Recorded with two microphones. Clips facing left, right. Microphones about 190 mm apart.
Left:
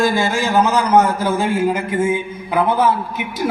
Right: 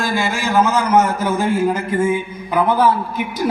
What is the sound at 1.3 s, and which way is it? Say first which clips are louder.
Mantra: right 2 dB; 30° left (ahead or behind).